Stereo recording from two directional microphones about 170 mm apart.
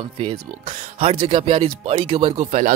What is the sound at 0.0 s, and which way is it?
Speech, 35° right (ahead or behind).